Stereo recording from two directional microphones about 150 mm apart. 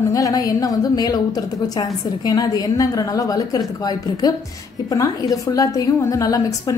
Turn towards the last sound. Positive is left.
turn(degrees=25)  # may be behind; listen again after turning